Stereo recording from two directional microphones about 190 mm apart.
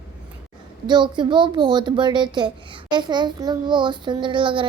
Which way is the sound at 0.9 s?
25° right (ahead or behind).